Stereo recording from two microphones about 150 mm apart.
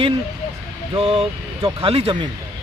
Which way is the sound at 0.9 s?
40° right (ahead or behind).